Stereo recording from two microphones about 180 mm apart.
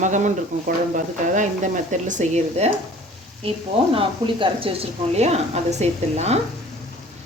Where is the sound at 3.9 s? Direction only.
30° right (ahead or behind).